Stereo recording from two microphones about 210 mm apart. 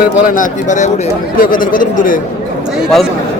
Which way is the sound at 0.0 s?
40° left (ahead or behind).